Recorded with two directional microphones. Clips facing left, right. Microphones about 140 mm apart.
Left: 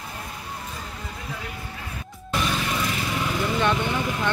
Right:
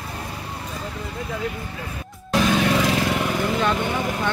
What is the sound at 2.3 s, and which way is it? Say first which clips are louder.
Music: right 7 dB; 80° right.